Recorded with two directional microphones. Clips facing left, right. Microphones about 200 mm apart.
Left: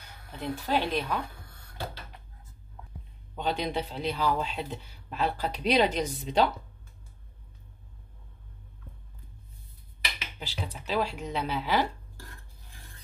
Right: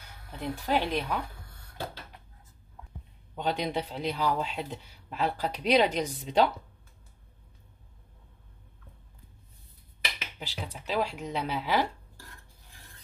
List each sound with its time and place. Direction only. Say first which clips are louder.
0.4 s speech: even; 15° right (ahead or behind)
3.3 s speech: even; 15° right (ahead or behind)
10.4 s speech: left 1 dB; 10° right (ahead or behind)